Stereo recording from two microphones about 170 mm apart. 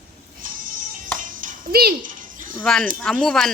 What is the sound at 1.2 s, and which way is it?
Music, 50° right (ahead or behind).